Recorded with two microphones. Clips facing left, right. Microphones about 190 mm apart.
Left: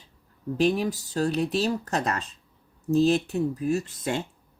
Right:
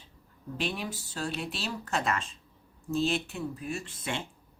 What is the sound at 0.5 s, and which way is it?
Speech, 40° left (ahead or behind).